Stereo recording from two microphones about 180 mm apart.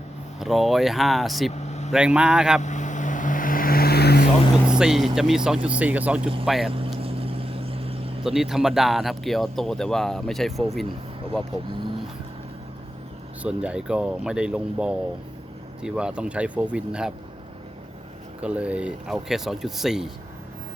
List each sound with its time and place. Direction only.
0.3 s speech: centre (ahead or behind)
1.6 s vehicle: 40° left (ahead or behind)
1.9 s speech: 5° right (ahead or behind)
2.6 s vehicle: 40° left (ahead or behind); by 4.3 s 60° left (ahead or behind)
4.7 s speech: 5° right (ahead or behind)
6.7 s vehicle: 30° right (ahead or behind)
8.2 s speech: centre (ahead or behind)
13.4 s speech: 5° right (ahead or behind)
18.4 s speech: 5° right (ahead or behind)